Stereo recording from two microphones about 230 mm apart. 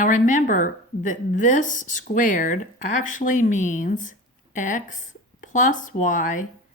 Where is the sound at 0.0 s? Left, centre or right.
Left.